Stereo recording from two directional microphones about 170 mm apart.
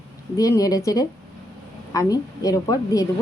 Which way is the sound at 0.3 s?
20° left (ahead or behind).